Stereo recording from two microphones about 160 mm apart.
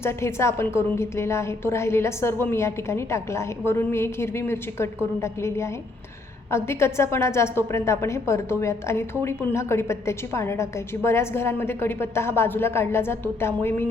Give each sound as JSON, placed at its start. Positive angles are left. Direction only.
{"t": 0.0, "sound": "a woman's voice", "side_deg": 15}